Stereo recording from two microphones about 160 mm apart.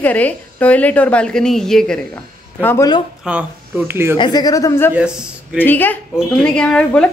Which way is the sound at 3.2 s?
10° right (ahead or behind).